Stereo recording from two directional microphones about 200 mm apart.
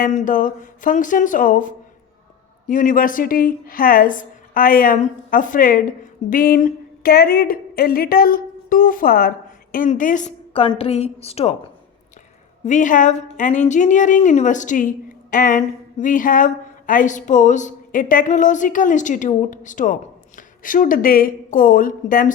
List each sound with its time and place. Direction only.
0.0 s a woman's voice: 40° left (ahead or behind)
12.6 s a woman's voice: 40° left (ahead or behind)